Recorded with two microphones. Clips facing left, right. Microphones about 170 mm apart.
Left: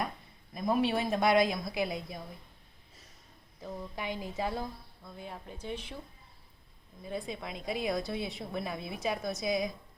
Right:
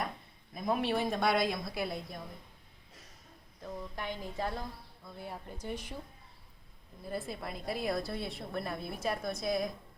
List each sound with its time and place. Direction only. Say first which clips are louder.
0.5 s a woman's voice: left 2 dB; centre (ahead or behind)
3.6 s a woman's voice: left 1 dB; 5° left (ahead or behind)
5.0 s a woman's voice: even; 5° right (ahead or behind)
7.0 s a woman's voice: left 1 dB; 5° right (ahead or behind)